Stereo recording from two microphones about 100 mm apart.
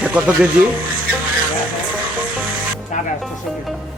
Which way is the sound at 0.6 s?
10° right (ahead or behind).